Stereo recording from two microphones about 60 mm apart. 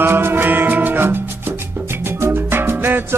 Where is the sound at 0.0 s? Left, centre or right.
Right.